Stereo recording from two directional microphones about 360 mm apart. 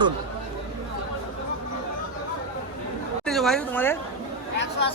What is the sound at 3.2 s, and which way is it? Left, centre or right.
Speech, centre.